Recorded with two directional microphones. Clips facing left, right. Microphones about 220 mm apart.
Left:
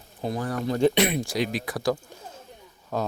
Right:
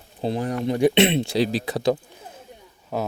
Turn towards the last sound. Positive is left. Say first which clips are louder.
# right 1 dB
turn(degrees=-10)  # may be behind; listen again after turning